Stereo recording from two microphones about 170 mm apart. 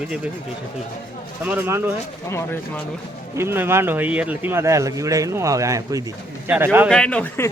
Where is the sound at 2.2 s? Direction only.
15° left (ahead or behind).